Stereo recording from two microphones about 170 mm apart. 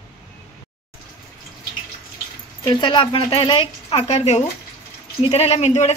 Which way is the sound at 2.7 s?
30° left (ahead or behind).